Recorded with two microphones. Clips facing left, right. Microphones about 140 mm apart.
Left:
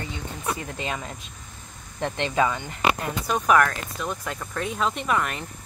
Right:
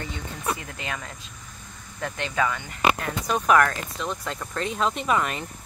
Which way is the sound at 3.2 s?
Centre (ahead or behind).